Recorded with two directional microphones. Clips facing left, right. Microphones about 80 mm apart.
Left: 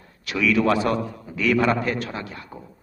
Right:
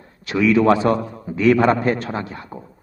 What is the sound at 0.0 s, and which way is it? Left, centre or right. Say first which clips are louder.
A man's voice: right 5 dB; right.